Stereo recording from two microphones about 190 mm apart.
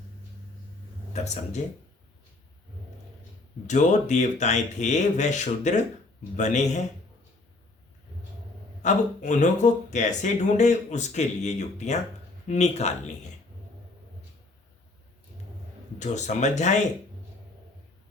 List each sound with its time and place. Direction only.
1.1 s speech: 35° left (ahead or behind)
3.7 s speech: 40° left (ahead or behind)
8.8 s speech: 40° left (ahead or behind)
16.0 s speech: 40° left (ahead or behind)